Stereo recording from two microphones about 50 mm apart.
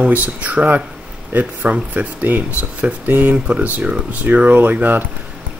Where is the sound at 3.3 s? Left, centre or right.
Centre.